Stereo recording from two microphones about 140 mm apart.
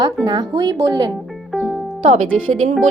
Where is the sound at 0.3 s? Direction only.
30° right (ahead or behind).